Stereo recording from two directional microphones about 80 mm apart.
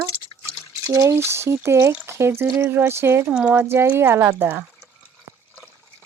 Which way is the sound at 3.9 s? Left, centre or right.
Right.